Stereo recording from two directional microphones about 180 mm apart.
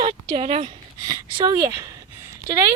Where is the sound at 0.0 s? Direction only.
25° right (ahead or behind).